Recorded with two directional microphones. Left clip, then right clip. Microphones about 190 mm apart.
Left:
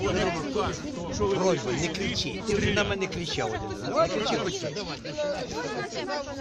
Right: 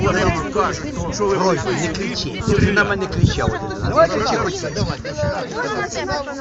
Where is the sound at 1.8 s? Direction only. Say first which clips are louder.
Right 6 dB; 15° left (ahead or behind).